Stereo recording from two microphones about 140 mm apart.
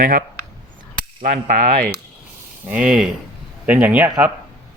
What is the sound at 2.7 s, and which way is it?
Speech, 5° right (ahead or behind).